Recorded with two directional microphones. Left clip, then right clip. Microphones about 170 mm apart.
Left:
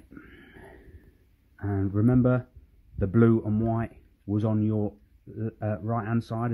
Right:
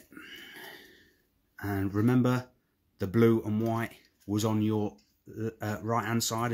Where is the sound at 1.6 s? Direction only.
30° left (ahead or behind).